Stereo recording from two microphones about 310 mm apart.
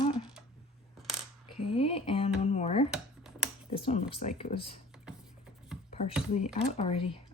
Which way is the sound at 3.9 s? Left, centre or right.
Centre.